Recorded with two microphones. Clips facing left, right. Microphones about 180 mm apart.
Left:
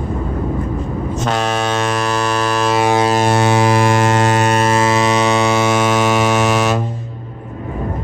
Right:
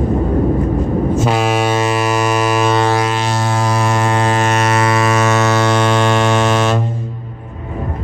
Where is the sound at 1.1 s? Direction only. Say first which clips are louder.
Even; 5° right (ahead or behind).